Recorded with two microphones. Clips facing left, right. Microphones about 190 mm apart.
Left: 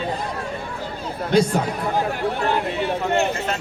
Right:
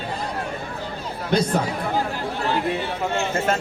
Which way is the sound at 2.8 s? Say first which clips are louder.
Left 4 dB; 60° left (ahead or behind).